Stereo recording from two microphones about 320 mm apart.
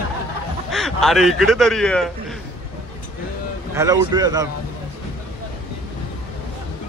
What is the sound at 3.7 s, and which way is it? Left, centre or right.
Speech, centre.